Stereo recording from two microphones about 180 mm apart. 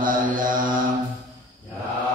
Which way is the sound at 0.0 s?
50° right (ahead or behind).